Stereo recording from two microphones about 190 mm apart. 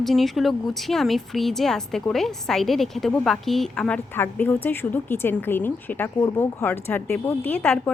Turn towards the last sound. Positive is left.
turn(degrees=10)  # may be behind; listen again after turning